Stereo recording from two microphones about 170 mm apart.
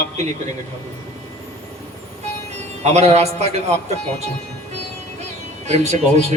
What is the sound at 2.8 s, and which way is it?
Speech, 40° right (ahead or behind).